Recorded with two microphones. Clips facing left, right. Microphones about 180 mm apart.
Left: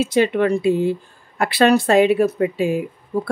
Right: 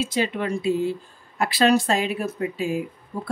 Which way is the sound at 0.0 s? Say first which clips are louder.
Left 8 dB; 60° left (ahead or behind).